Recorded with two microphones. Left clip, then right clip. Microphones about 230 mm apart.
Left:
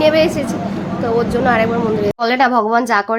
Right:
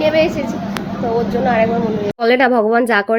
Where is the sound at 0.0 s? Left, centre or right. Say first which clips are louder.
Left 2 dB; centre.